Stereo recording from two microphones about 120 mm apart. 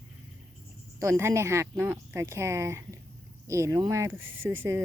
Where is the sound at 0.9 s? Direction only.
25° right (ahead or behind).